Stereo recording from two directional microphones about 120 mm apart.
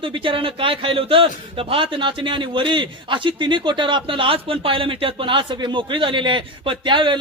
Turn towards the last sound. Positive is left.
turn(degrees=-40)  # may be behind; listen again after turning